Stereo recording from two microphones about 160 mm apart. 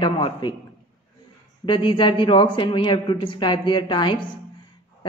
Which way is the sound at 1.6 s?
30° left (ahead or behind).